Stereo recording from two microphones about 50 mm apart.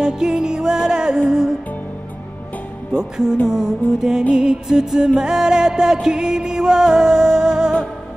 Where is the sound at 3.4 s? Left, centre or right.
Centre.